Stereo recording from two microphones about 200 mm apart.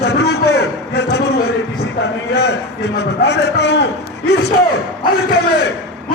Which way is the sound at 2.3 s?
55° left (ahead or behind).